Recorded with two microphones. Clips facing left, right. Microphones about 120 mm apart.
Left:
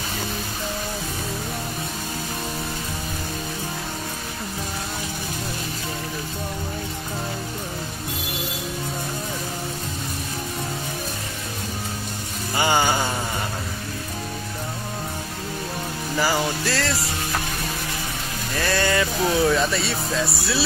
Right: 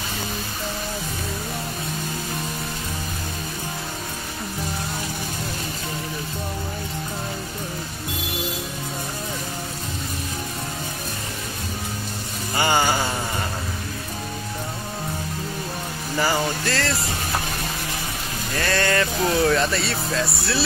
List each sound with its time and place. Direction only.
12.5 s music: 15° left (ahead or behind)
16.2 s music: 10° left (ahead or behind)
18.6 s speech: 10° left (ahead or behind)